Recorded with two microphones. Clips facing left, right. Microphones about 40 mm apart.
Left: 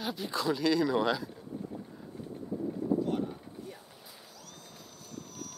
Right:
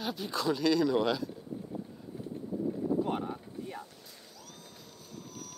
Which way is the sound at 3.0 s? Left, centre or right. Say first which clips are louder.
Even; right.